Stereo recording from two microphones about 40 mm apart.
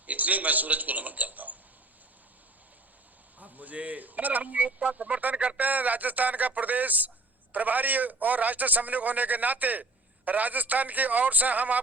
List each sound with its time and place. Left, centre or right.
0.0 s a man's voice: right
3.4 s speech: right